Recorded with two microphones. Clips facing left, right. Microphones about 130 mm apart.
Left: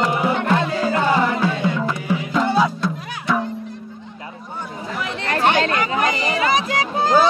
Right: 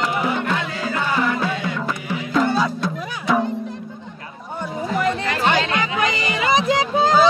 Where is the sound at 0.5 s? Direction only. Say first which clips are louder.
Left 5 dB; 35° left (ahead or behind).